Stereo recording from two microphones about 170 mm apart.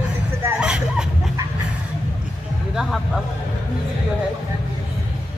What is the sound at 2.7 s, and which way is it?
Music, centre (ahead or behind).